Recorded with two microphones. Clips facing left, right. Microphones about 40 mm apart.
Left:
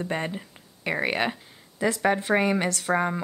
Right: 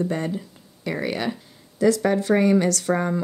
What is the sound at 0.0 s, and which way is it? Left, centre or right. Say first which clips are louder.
Speech: right 4 dB; left.